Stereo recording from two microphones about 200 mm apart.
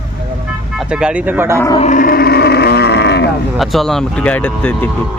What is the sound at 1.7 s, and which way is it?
Livestock, 35° left (ahead or behind).